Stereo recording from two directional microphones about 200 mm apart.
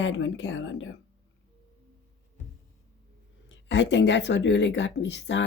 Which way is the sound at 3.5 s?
65° left (ahead or behind).